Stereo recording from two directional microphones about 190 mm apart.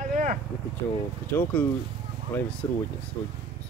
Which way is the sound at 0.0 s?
40° right (ahead or behind).